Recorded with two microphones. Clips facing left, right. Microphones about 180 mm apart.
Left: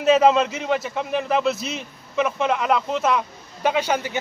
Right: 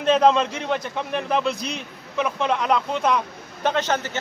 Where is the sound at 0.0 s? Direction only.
5° left (ahead or behind).